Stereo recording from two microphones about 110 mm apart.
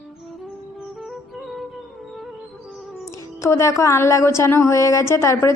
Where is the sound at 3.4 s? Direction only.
25° left (ahead or behind).